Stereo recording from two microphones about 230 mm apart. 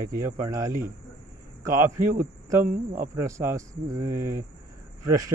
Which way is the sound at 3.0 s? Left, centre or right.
Centre.